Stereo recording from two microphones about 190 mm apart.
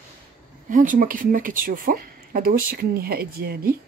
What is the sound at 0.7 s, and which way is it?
Speech, 45° right (ahead or behind).